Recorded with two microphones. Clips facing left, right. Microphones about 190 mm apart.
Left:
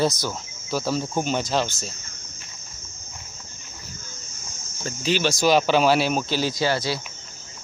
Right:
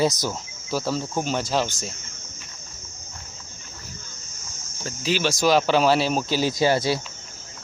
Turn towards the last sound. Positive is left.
turn(degrees=-25)  # may be behind; listen again after turning